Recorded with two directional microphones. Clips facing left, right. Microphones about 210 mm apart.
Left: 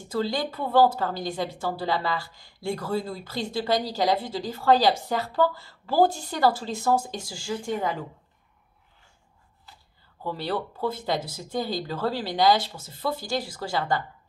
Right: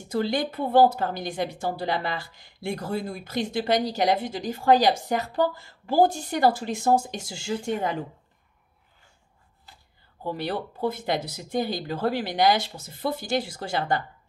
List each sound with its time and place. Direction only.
0.1 s speech: 20° right (ahead or behind)
10.2 s speech: 20° right (ahead or behind)